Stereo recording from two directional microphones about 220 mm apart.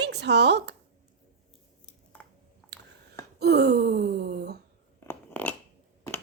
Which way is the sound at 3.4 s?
45° right (ahead or behind).